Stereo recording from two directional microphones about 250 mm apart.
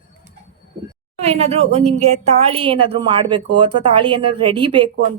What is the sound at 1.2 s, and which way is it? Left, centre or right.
A woman's voice, right.